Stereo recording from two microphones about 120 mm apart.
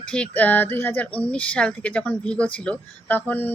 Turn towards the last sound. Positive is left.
turn(degrees=15)  # may be behind; listen again after turning